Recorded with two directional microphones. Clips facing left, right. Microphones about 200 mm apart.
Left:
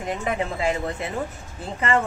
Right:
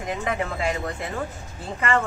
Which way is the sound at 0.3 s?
25° left (ahead or behind).